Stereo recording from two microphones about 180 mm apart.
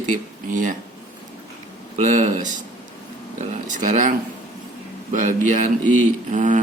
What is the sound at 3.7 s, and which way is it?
Speech, 45° right (ahead or behind).